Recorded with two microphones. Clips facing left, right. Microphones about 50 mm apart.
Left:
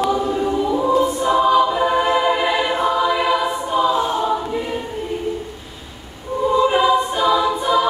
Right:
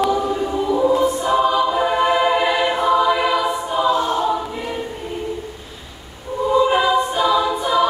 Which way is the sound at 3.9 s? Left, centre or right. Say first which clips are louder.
Even; centre.